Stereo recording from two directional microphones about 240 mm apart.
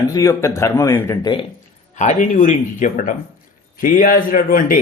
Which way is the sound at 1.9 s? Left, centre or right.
Left.